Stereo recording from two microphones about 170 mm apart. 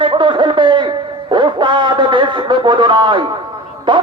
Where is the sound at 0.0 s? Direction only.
30° right (ahead or behind).